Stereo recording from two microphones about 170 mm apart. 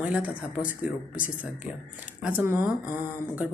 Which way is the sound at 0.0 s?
10° right (ahead or behind).